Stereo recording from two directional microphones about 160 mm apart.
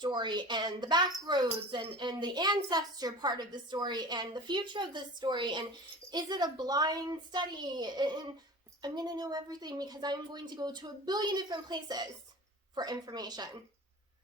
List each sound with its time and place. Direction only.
0.0 s a woman's voice: 30° right (ahead or behind)